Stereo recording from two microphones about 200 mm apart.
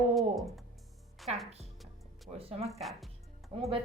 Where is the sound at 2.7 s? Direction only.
Centre (ahead or behind).